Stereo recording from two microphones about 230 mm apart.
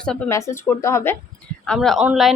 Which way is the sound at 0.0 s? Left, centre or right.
Centre.